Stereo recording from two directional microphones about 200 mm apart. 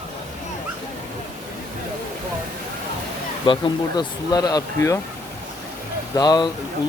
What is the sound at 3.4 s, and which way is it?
Speech, 20° left (ahead or behind).